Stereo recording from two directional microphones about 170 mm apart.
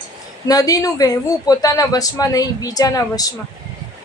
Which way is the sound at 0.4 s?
20° left (ahead or behind).